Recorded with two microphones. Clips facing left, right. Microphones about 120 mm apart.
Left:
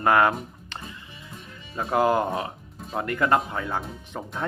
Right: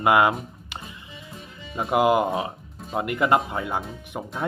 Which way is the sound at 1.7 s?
15° right (ahead or behind).